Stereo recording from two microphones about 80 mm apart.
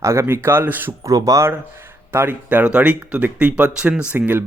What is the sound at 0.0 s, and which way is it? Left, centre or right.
Speech, right.